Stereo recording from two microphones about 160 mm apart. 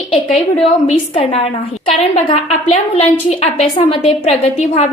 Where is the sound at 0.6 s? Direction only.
40° left (ahead or behind).